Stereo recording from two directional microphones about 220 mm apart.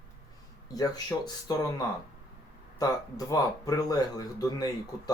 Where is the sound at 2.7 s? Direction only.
15° left (ahead or behind).